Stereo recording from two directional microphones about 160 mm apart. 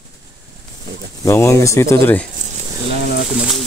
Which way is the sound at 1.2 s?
15° left (ahead or behind).